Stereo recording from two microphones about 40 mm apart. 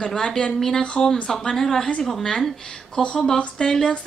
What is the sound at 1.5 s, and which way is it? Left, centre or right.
A woman's voice, centre.